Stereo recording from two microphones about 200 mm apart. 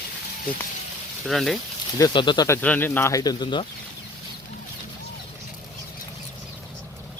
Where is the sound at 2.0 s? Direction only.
20° left (ahead or behind).